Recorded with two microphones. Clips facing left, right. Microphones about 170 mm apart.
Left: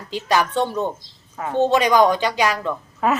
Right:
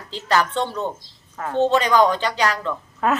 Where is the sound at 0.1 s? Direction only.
15° left (ahead or behind).